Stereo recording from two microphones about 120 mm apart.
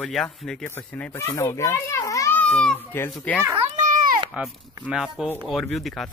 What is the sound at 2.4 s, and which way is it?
Speech, 5° left (ahead or behind).